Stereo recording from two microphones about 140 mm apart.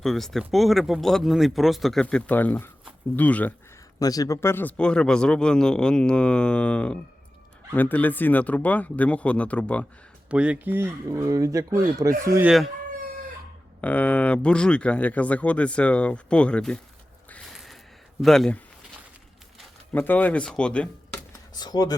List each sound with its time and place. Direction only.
0.0 s speech: centre (ahead or behind)
4.0 s speech: 25° left (ahead or behind); by 9.8 s 10° left (ahead or behind)
10.2 s speech: 10° right (ahead or behind)
12.4 s speech: 5° right (ahead or behind)
13.8 s speech: 10° left (ahead or behind)
18.2 s speech: 5° left (ahead or behind)
19.9 s speech: 10° left (ahead or behind)
21.5 s speech: 30° left (ahead or behind)